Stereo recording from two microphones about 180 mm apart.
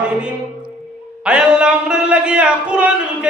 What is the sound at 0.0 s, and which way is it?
Speech, 5° right (ahead or behind).